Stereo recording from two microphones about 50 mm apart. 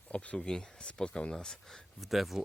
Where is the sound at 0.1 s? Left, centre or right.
Left.